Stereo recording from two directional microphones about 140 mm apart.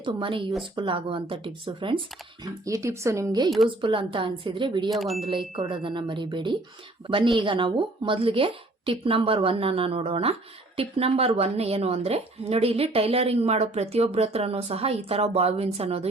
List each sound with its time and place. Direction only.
0.0 s a woman's voice: 35° right (ahead or behind)
2.4 s speech: 25° right (ahead or behind)
3.7 s a woman's voice: 35° right (ahead or behind)
4.9 s speech: centre (ahead or behind)
5.3 s a woman's voice: 40° right (ahead or behind)